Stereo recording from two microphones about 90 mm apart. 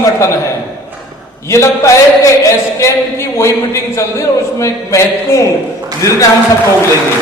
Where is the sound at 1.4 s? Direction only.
35° left (ahead or behind).